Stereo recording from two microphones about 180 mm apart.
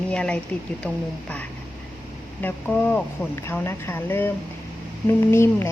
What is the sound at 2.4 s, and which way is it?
Speech, 10° left (ahead or behind).